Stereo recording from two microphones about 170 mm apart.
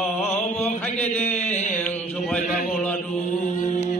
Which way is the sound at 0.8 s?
10° left (ahead or behind).